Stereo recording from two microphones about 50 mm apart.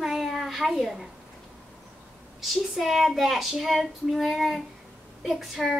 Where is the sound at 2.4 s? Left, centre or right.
Centre.